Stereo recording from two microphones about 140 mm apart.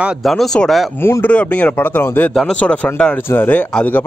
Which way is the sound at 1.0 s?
15° left (ahead or behind).